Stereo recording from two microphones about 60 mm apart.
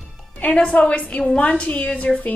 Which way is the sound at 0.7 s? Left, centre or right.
Left.